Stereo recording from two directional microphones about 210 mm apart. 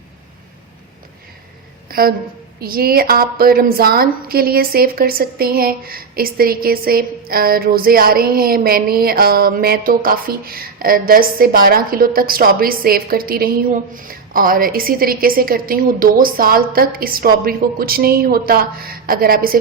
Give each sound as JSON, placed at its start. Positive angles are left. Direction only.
{"t": 1.9, "sound": "a woman's voice", "side_deg": -45}